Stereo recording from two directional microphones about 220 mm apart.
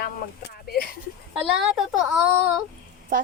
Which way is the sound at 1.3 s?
5° right (ahead or behind).